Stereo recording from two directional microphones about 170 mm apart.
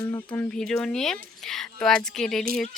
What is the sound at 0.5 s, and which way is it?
Speech, 5° left (ahead or behind).